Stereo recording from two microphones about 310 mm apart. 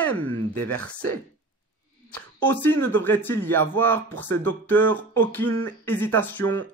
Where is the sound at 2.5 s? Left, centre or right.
Centre.